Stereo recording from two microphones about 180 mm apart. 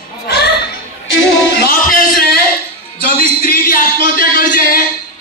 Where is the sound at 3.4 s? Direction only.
55° left (ahead or behind).